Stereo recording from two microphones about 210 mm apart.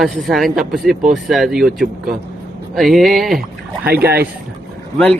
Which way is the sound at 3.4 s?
45° right (ahead or behind).